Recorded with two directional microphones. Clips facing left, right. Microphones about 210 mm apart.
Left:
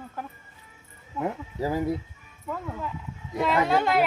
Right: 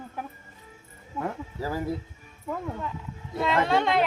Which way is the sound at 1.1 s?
15° left (ahead or behind).